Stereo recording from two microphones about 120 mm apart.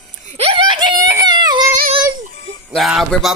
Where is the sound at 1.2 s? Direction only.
35° right (ahead or behind).